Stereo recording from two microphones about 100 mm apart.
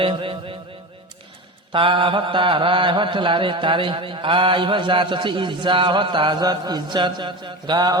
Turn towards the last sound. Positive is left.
turn(degrees=-45)  # may be behind; listen again after turning